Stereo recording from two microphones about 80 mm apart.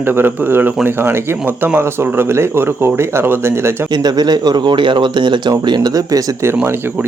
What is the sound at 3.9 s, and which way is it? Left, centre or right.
Speech, right.